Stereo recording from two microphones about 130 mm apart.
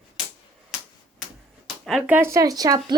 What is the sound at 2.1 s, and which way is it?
Speech, 20° right (ahead or behind).